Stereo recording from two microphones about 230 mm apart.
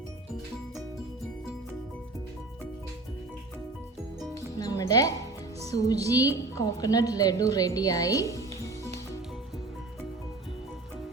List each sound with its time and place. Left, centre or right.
4.5 s music: centre
5.7 s a woman's voice: centre